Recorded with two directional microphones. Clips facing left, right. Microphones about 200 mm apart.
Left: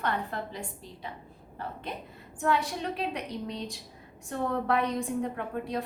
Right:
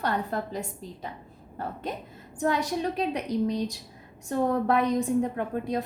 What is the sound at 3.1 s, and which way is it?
A woman's voice, 35° right (ahead or behind).